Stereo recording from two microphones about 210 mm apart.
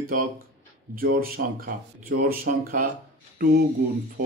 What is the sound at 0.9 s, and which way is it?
Speech, 45° right (ahead or behind).